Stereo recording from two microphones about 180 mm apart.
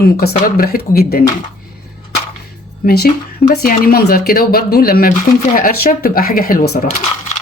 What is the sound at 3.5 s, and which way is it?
Speech, 55° left (ahead or behind).